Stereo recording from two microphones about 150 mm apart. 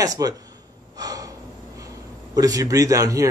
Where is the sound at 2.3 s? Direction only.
25° right (ahead or behind).